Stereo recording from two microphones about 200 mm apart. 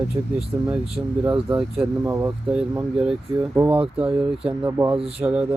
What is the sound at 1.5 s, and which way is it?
Speech, 5° right (ahead or behind).